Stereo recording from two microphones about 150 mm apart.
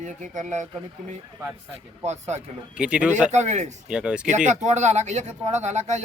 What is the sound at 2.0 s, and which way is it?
Speech, 50° right (ahead or behind).